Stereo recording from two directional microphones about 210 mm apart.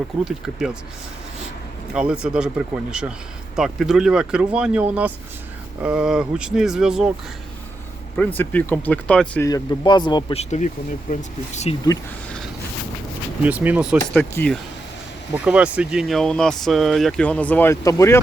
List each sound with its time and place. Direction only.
0.3 s speech: 5° right (ahead or behind)
1.9 s a man's voice: 5° right (ahead or behind)
8.4 s speech: 10° left (ahead or behind)
11.1 s speech: 30° left (ahead or behind)
13.4 s speech: 5° right (ahead or behind)
14.2 s speech: 5° left (ahead or behind)
15.4 s speech: 5° right (ahead or behind); by 18.2 s 15° left (ahead or behind)